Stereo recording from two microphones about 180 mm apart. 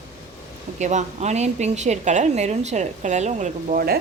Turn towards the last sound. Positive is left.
turn(degrees=-55)  # may be behind; listen again after turning